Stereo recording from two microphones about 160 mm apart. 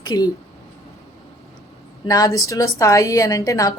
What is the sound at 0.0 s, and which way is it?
Speech, 25° left (ahead or behind).